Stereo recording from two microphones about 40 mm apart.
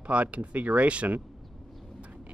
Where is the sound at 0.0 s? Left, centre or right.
Right.